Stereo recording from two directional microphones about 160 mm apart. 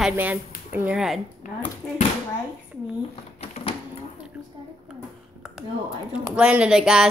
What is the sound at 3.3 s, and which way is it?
Printer, 40° left (ahead or behind).